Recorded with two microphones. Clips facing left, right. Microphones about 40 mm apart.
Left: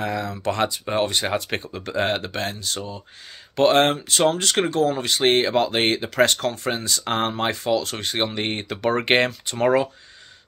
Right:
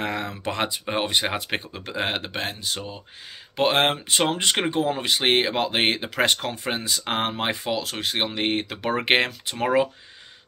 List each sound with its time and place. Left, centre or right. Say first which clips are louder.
0.0 s speech: left 3 dB; right; by 9.8 s centre